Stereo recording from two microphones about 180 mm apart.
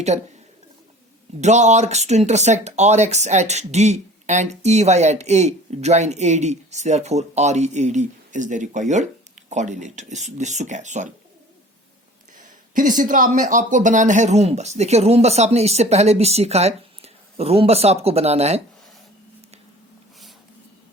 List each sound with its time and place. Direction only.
1.4 s speech: 40° right (ahead or behind)
12.4 s speech: 45° right (ahead or behind)